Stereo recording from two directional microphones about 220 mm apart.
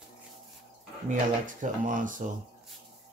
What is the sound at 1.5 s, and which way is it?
Speech, 35° right (ahead or behind).